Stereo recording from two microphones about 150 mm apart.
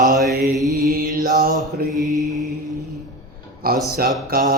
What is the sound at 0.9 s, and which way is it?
Mantra, 90° right.